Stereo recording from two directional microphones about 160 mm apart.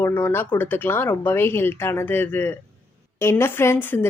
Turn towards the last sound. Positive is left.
turn(degrees=15)  # may be behind; listen again after turning